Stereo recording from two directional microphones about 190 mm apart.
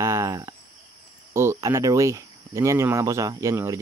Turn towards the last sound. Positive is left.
turn(degrees=-15)  # may be behind; listen again after turning